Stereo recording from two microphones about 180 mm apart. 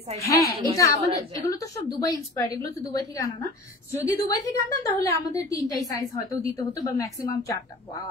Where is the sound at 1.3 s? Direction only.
20° left (ahead or behind).